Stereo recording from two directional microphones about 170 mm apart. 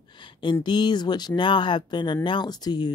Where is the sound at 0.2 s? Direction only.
30° left (ahead or behind).